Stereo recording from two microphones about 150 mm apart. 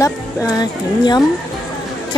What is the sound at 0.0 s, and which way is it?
A woman's voice, 25° left (ahead or behind).